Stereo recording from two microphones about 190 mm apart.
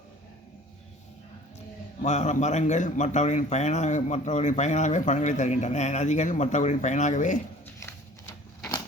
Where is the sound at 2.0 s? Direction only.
40° left (ahead or behind).